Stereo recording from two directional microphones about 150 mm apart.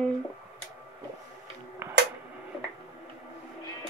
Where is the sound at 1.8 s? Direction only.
15° right (ahead or behind).